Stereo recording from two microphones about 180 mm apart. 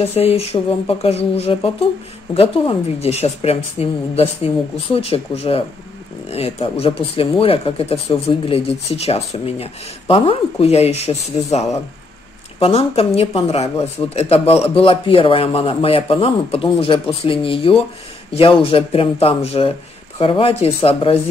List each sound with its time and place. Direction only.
0.0 s speech: 35° left (ahead or behind)